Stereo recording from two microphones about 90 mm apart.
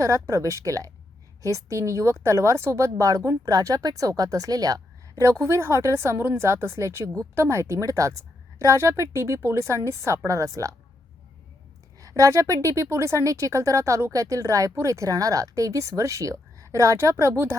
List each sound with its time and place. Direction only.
0.0 s a woman's voice: 35° right (ahead or behind)
11.9 s a woman's voice: 40° right (ahead or behind)